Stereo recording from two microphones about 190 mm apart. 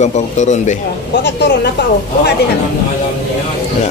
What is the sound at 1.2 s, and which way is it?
Speech, 65° left (ahead or behind).